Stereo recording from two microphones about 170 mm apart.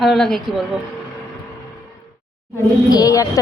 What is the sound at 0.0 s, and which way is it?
Speech, centre (ahead or behind).